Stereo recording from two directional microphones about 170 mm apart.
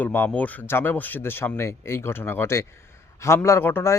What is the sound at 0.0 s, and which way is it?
Speech, 10° left (ahead or behind).